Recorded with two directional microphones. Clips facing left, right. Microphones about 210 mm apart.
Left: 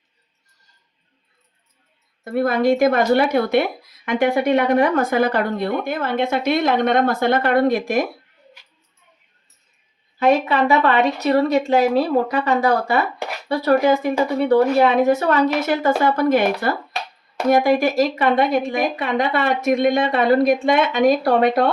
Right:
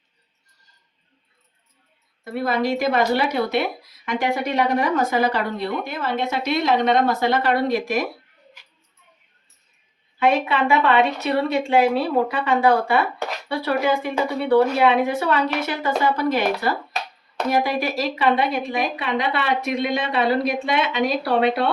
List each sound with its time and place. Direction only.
2.2 s speech: 50° left (ahead or behind)
10.2 s a woman's voice: 40° left (ahead or behind)
17.5 s speech: 45° left (ahead or behind)